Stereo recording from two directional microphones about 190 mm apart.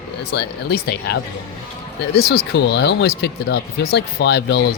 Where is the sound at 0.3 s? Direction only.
55° left (ahead or behind).